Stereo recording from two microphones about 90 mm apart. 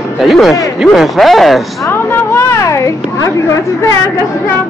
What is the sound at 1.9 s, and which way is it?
A woman's voice, 25° left (ahead or behind).